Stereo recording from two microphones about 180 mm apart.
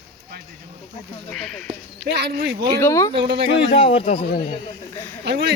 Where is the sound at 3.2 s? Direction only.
70° right (ahead or behind).